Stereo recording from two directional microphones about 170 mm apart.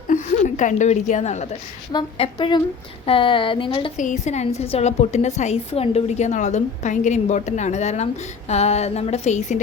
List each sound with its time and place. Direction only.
0.1 s a woman's voice: 45° left (ahead or behind)
1.9 s a woman's voice: 30° left (ahead or behind)
3.9 s a woman's voice: 45° left (ahead or behind)